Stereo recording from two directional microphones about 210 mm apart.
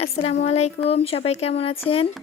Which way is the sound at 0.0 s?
30° left (ahead or behind).